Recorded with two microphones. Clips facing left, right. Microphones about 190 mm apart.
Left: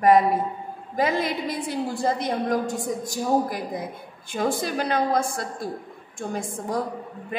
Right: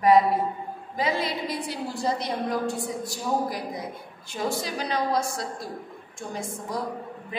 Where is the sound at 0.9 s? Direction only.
50° left (ahead or behind).